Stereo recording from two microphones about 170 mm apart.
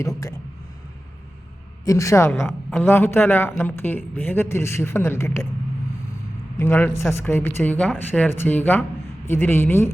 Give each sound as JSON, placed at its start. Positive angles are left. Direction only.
{"t": 0.0, "sound": "speech", "side_deg": 20}
{"t": 1.8, "sound": "a man's voice", "side_deg": 20}
{"t": 6.6, "sound": "a man's voice", "side_deg": 10}